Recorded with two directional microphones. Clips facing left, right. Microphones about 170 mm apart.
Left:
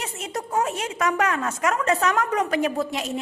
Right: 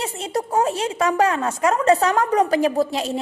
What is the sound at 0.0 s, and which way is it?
A woman's voice, 30° right (ahead or behind).